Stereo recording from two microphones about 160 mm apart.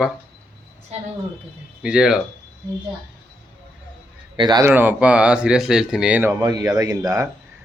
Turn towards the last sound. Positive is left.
turn(degrees=-25)  # may be behind; listen again after turning